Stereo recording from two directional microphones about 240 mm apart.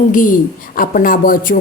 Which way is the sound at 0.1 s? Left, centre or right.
Left.